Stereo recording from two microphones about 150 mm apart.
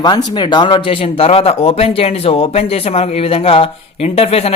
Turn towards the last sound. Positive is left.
turn(degrees=40)  # may be behind; listen again after turning